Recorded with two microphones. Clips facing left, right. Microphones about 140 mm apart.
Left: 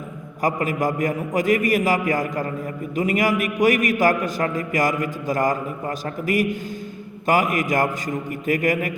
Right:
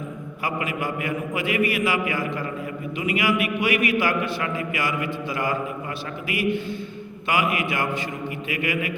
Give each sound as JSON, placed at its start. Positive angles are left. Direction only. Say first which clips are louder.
{"t": 0.4, "sound": "a man's voice", "louder": "left 6 dB", "side_deg": 40}